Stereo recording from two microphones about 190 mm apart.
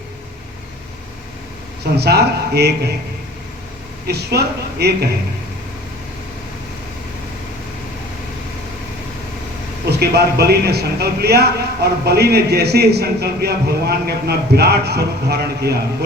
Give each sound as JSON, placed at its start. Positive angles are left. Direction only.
{"t": 2.0, "sound": "a man's voice", "side_deg": -60}
{"t": 4.0, "sound": "a man's voice", "side_deg": -60}
{"t": 9.9, "sound": "a man's voice", "side_deg": -60}